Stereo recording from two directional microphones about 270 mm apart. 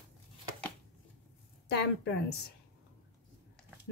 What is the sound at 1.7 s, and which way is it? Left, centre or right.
Speech, left.